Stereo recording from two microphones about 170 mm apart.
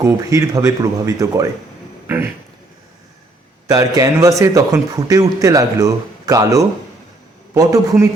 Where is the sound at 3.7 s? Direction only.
20° right (ahead or behind).